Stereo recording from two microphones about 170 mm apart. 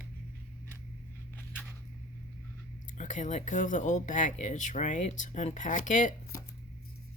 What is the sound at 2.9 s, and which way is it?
Speech, 45° left (ahead or behind).